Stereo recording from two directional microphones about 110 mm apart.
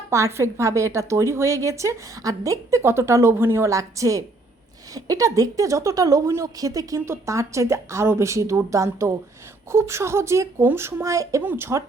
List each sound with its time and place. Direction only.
0.1 s a woman's voice: 25° right (ahead or behind)